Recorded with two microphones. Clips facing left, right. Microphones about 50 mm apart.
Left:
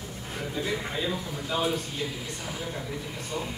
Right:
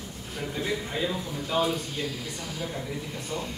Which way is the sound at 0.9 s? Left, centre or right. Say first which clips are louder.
Right 1 dB; centre.